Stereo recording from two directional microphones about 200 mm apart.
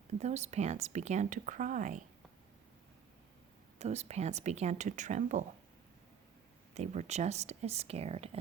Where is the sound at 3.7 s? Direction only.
35° right (ahead or behind).